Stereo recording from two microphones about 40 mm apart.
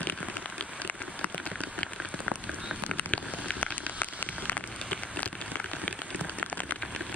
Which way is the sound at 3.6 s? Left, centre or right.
Left.